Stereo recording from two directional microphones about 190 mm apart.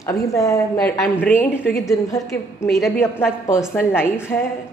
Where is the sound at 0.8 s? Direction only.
5° left (ahead or behind).